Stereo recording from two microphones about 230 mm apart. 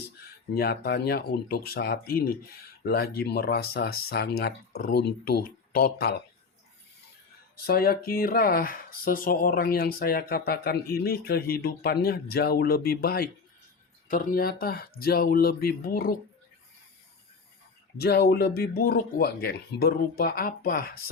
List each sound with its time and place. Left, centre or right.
0.5 s speech: left
7.5 s speech: left
17.9 s speech: left